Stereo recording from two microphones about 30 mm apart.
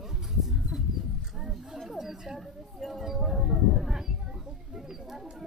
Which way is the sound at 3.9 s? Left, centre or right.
Centre.